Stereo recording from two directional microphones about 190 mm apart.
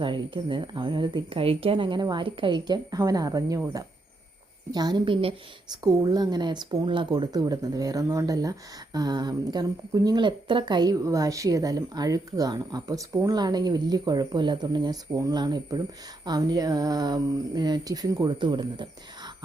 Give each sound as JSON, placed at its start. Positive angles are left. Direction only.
{"t": 0.0, "sound": "speech", "side_deg": -25}